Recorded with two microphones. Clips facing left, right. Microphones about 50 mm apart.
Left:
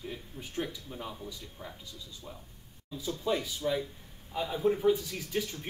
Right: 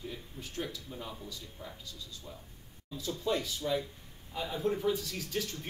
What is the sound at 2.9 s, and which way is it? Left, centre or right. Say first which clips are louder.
Speech: left 1 dB; centre.